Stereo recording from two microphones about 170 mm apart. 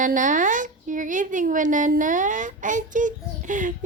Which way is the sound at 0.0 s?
50° right (ahead or behind).